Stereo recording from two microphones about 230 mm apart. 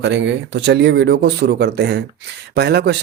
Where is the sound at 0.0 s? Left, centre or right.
Right.